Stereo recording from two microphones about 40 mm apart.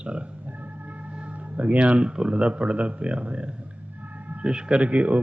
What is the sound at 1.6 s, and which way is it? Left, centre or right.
Speech, right.